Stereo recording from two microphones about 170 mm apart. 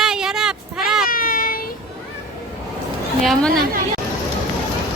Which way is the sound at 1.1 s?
55° left (ahead or behind).